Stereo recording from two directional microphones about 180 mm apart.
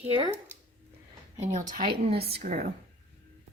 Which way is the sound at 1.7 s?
55° right (ahead or behind).